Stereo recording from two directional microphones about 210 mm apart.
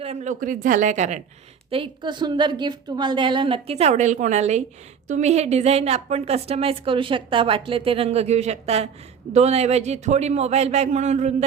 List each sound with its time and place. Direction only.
0.0 s a man's voice: 30° right (ahead or behind)
1.7 s a woman's voice: 25° right (ahead or behind)